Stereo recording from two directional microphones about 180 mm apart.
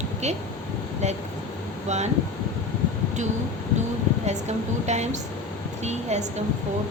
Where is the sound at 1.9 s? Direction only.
40° right (ahead or behind).